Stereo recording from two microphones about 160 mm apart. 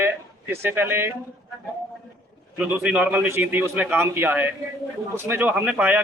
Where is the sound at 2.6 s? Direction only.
10° right (ahead or behind).